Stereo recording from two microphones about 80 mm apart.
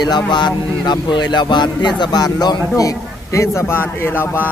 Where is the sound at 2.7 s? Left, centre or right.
Left.